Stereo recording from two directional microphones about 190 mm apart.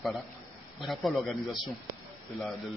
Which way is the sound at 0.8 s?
Centre (ahead or behind).